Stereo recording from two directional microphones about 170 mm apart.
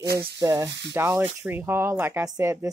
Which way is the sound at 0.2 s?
25° right (ahead or behind).